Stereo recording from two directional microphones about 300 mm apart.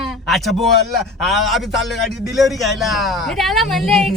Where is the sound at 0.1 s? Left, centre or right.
Centre.